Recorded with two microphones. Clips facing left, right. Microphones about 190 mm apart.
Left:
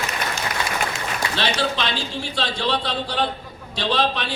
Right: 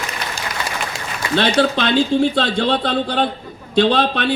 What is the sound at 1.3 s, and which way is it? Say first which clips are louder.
Speech: right 10 dB; 55° right (ahead or behind).